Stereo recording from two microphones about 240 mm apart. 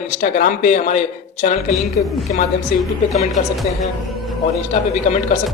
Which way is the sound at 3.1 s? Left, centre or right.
Left.